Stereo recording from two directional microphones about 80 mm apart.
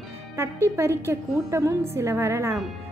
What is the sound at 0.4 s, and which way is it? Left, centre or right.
Speech, right.